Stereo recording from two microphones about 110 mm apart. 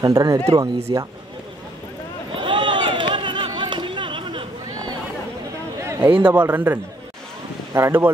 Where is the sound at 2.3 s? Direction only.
50° right (ahead or behind).